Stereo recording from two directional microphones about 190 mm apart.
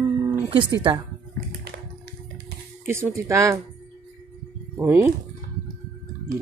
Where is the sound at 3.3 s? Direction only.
15° right (ahead or behind).